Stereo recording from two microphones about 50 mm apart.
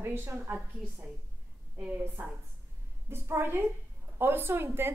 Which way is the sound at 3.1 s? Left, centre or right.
Right.